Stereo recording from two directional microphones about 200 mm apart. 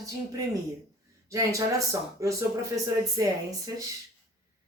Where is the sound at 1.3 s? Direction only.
15° right (ahead or behind).